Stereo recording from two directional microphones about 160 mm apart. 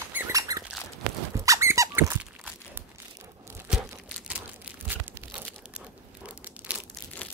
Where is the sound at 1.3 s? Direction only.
20° right (ahead or behind).